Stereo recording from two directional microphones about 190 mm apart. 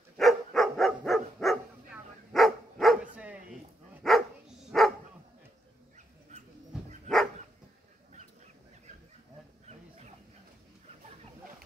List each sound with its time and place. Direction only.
0.2 s dog: centre (ahead or behind)
6.3 s a sound: 35° right (ahead or behind)
9.7 s dog: 35° right (ahead or behind)